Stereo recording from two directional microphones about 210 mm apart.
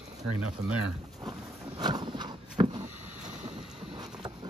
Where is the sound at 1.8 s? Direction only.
20° right (ahead or behind).